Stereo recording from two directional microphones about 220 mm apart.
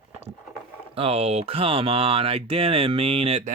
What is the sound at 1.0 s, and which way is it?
Speech, 25° right (ahead or behind).